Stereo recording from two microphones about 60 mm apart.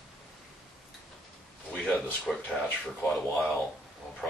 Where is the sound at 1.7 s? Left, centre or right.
Centre.